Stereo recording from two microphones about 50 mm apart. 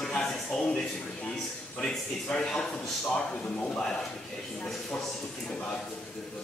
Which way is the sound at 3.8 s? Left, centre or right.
Centre.